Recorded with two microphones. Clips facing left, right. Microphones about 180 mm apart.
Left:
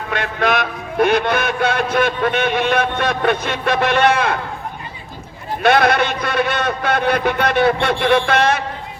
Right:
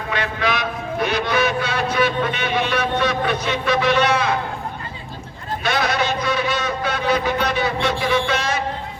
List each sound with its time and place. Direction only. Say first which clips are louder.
0.1 s speech: left 4 dB; 50° left (ahead or behind)
5.6 s a man's voice: left 7 dB; 60° left (ahead or behind)